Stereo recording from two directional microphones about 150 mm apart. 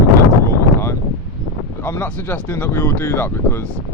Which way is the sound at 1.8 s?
15° left (ahead or behind).